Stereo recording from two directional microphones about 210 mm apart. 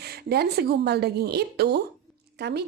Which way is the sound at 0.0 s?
50° right (ahead or behind).